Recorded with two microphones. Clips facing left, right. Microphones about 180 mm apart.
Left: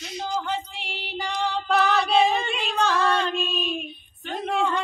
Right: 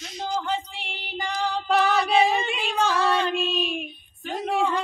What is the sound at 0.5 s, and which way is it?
Female singing, centre (ahead or behind).